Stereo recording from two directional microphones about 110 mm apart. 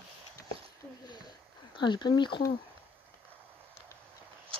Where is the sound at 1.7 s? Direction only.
45° left (ahead or behind).